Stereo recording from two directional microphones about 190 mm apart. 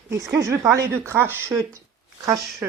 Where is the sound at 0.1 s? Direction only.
15° right (ahead or behind).